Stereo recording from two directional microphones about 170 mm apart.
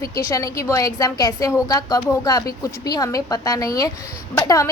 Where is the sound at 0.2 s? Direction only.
20° left (ahead or behind).